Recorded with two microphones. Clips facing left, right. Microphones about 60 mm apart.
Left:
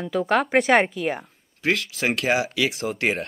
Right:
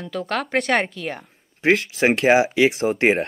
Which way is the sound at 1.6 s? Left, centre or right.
Right.